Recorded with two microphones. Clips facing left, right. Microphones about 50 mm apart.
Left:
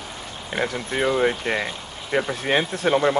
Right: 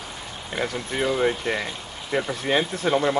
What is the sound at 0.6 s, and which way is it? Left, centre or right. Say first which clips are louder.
Speech: left 2 dB; left.